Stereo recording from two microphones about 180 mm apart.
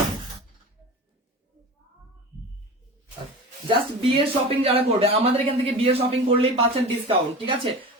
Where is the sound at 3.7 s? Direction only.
30° right (ahead or behind).